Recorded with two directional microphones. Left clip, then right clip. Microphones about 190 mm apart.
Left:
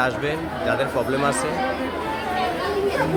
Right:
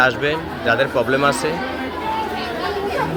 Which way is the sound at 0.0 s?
15° right (ahead or behind).